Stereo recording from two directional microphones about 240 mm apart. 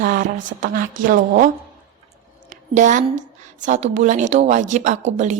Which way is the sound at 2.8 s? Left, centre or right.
Right.